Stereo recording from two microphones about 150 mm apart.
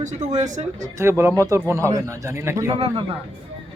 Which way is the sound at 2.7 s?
40° right (ahead or behind).